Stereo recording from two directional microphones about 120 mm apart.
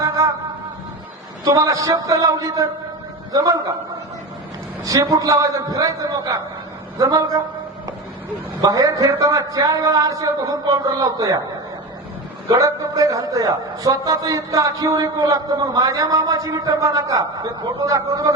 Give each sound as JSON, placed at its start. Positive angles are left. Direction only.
{"t": 1.5, "sound": "a man's voice", "side_deg": -30}
{"t": 4.9, "sound": "a man's voice", "side_deg": -30}
{"t": 8.6, "sound": "a man's voice", "side_deg": -30}
{"t": 12.5, "sound": "a man's voice", "side_deg": -30}